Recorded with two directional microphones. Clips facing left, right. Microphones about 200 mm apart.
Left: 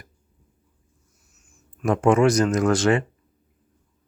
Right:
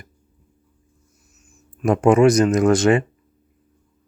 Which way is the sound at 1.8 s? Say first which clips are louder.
Right 4 dB; 15° right (ahead or behind).